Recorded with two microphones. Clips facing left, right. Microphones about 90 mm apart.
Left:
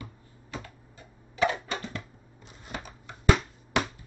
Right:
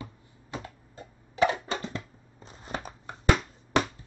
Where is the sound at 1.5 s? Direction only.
30° right (ahead or behind).